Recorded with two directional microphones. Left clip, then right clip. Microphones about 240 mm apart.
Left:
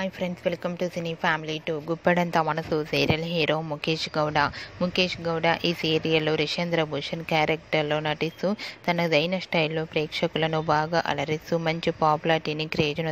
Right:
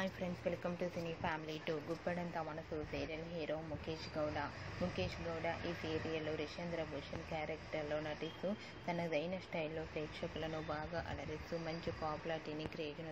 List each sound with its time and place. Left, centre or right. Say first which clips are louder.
0.0 s a woman's voice: left 13 dB; left